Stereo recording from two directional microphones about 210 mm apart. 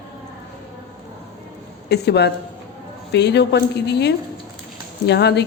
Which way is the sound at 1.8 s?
50° left (ahead or behind).